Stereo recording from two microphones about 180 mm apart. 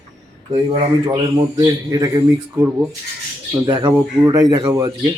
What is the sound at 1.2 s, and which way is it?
Speech, 20° right (ahead or behind).